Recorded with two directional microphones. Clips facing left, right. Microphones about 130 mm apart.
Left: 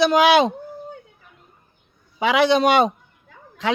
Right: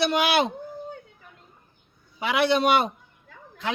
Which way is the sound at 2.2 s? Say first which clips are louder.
Left 5 dB; 90° left.